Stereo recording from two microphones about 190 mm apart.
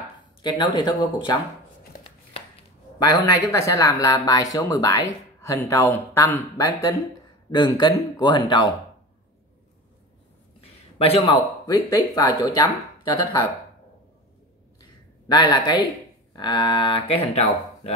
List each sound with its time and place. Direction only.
0.4 s speech: 25° left (ahead or behind)
3.1 s speech: 15° left (ahead or behind)
11.0 s speech: 30° left (ahead or behind)
15.2 s speech: 20° left (ahead or behind)